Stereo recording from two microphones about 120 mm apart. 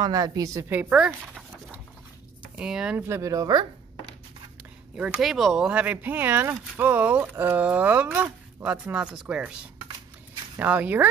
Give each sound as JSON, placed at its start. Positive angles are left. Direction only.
{"t": 0.0, "sound": "speech", "side_deg": -30}
{"t": 3.1, "sound": "speech", "side_deg": -25}
{"t": 4.9, "sound": "speech", "side_deg": -10}
{"t": 10.6, "sound": "speech", "side_deg": -15}